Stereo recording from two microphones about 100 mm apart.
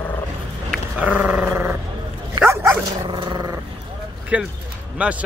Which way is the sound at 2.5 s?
30° right (ahead or behind).